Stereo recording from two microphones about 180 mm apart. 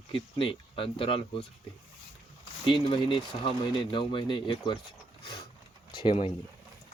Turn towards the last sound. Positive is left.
turn(degrees=35)  # may be behind; listen again after turning